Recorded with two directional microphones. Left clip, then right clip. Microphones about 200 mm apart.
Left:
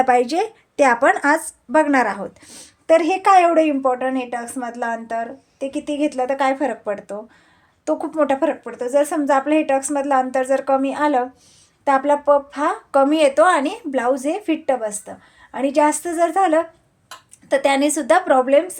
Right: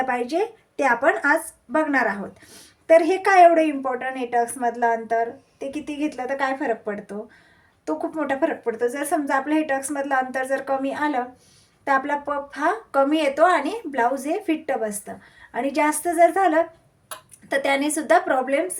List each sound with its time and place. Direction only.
0.0 s speech: 55° left (ahead or behind); by 18.6 s 40° left (ahead or behind)